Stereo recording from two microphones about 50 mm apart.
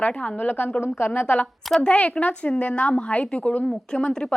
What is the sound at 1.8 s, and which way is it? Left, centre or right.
A woman's voice, left.